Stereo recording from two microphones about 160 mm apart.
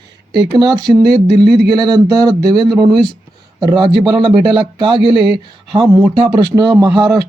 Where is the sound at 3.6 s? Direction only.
30° right (ahead or behind).